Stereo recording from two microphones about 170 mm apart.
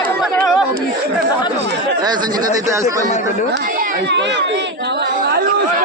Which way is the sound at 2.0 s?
25° right (ahead or behind).